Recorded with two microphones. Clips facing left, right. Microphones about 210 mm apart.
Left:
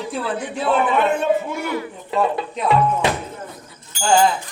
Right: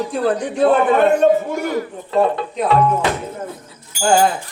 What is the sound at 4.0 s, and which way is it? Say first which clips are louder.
Speech: right 2 dB; 50° right (ahead or behind).